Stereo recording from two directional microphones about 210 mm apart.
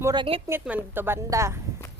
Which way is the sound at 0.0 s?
20° right (ahead or behind).